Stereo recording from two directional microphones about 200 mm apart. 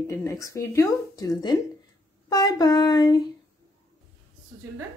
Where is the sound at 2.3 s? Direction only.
20° left (ahead or behind).